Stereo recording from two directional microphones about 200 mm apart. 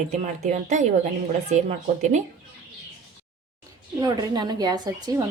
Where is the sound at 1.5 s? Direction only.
35° right (ahead or behind).